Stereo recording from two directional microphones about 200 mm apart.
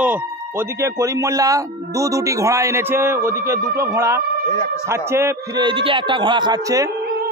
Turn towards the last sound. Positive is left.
turn(degrees=-20)  # may be behind; listen again after turning